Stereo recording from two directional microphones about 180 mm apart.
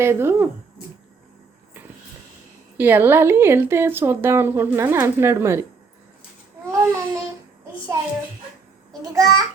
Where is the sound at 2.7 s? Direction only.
10° right (ahead or behind).